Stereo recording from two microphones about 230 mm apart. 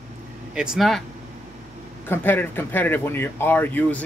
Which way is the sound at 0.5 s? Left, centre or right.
Centre.